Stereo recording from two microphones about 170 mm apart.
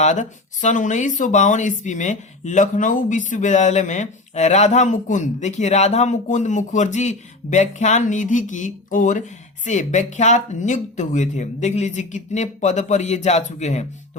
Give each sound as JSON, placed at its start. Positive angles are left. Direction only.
{"t": 0.0, "sound": "speech", "side_deg": 45}